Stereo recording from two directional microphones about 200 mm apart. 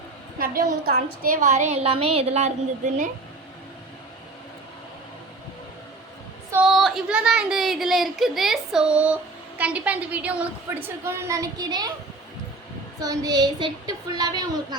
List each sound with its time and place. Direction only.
0.3 s a woman's voice: 45° right (ahead or behind)
6.7 s a child's voice: centre (ahead or behind); by 11.9 s 20° right (ahead or behind)
13.0 s a woman's voice: 20° right (ahead or behind)